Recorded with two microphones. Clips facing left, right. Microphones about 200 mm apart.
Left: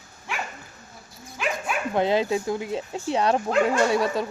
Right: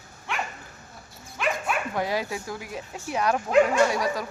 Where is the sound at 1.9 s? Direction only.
25° left (ahead or behind).